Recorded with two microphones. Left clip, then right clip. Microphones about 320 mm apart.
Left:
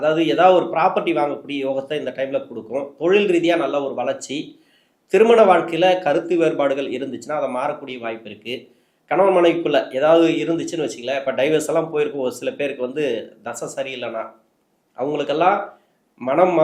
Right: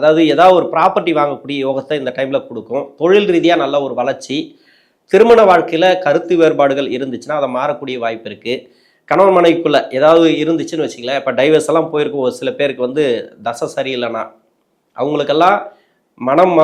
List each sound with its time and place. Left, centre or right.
0.0 s speech: right